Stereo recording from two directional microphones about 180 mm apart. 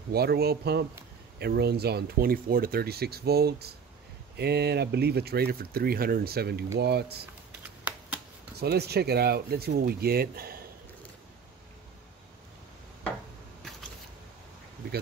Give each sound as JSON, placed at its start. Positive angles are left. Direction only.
{"t": 0.1, "sound": "speech", "side_deg": -60}
{"t": 7.9, "sound": "shuffling cards", "side_deg": -10}
{"t": 8.5, "sound": "speech", "side_deg": -65}